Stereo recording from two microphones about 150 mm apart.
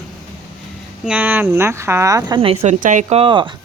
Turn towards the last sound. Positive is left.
turn(degrees=-35)  # may be behind; listen again after turning